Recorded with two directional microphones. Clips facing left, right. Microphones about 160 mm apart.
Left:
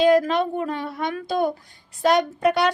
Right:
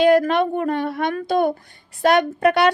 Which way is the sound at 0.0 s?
60° right (ahead or behind).